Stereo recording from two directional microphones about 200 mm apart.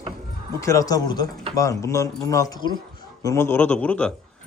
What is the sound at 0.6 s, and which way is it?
A man's voice, 15° left (ahead or behind).